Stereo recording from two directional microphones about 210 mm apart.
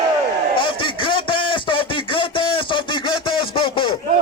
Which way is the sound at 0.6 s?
25° left (ahead or behind).